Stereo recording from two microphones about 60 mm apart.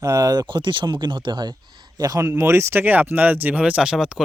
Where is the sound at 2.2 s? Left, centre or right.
Right; by 4.2 s centre.